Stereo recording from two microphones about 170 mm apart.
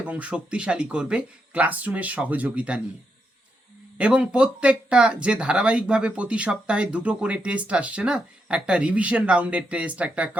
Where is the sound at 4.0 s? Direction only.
5° right (ahead or behind).